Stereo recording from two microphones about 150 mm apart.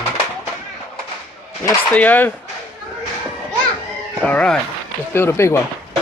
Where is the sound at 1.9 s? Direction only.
10° left (ahead or behind).